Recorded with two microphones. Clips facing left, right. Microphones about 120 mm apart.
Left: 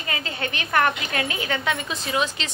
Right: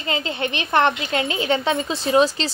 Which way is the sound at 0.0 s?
25° right (ahead or behind).